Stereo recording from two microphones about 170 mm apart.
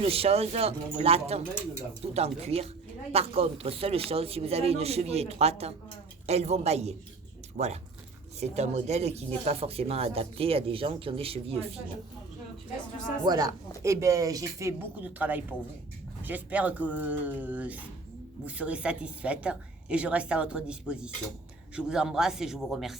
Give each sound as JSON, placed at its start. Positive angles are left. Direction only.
{"t": 0.0, "sound": "speech", "side_deg": -35}
{"t": 13.2, "sound": "a woman's voice", "side_deg": -20}